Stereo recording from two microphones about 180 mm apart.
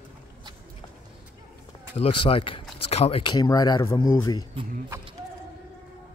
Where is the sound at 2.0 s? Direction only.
30° left (ahead or behind).